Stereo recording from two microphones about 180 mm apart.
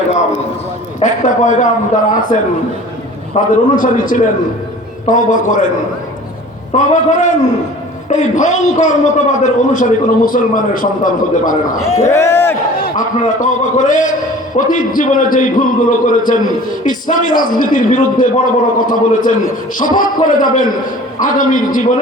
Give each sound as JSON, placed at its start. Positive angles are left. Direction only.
{"t": 0.9, "sound": "a man's voice", "side_deg": 45}
{"t": 6.7, "sound": "a man's voice", "side_deg": 45}
{"t": 12.0, "sound": "a man's voice", "side_deg": 15}
{"t": 12.8, "sound": "a man's voice", "side_deg": 45}